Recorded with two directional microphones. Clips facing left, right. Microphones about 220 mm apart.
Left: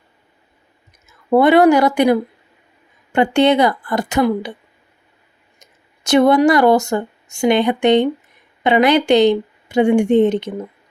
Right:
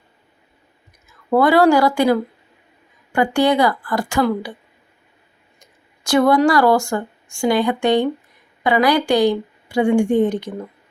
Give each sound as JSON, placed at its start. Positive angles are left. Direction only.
{"t": 1.0, "sound": "a woman's voice", "side_deg": 20}
{"t": 5.5, "sound": "speech", "side_deg": 20}